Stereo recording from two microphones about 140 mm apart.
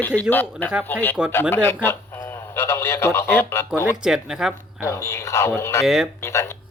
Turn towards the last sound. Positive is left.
turn(degrees=20)  # may be behind; listen again after turning